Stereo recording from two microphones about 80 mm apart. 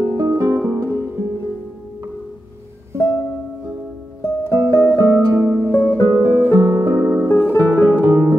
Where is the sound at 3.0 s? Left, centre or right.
Left.